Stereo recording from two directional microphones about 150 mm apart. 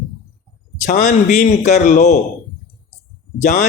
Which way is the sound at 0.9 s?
55° left (ahead or behind).